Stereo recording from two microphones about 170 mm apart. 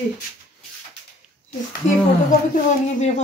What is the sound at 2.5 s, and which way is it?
Speech, 40° left (ahead or behind).